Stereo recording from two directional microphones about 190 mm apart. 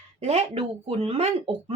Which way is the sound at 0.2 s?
35° right (ahead or behind).